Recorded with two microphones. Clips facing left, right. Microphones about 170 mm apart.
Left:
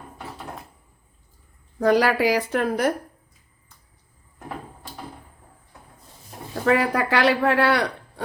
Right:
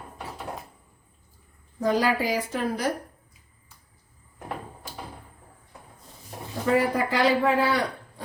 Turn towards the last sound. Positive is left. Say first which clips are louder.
# left 2 dB
turn(degrees=75)  # may be behind; listen again after turning